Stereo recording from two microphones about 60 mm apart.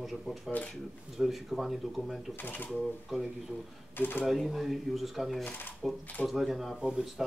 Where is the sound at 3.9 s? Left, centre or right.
Left.